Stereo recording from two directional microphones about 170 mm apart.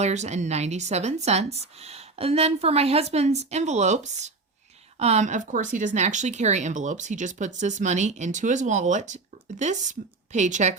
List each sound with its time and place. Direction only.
0.0 s speech: 40° right (ahead or behind)